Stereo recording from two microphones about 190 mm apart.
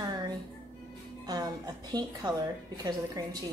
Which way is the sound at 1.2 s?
20° right (ahead or behind).